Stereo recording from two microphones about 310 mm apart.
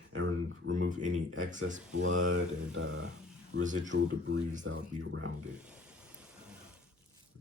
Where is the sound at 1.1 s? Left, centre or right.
Right.